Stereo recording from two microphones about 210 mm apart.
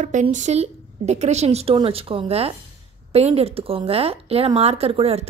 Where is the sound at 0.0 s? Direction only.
35° right (ahead or behind).